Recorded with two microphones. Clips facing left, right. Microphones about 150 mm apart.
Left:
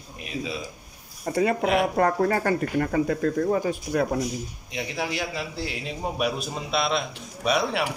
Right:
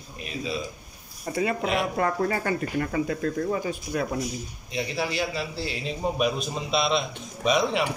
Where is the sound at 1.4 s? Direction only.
50° left (ahead or behind).